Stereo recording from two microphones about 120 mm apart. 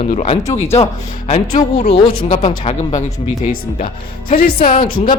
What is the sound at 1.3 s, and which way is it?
Speech, 90° left.